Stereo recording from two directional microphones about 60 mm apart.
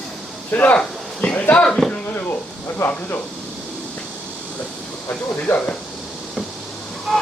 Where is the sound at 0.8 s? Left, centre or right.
Centre.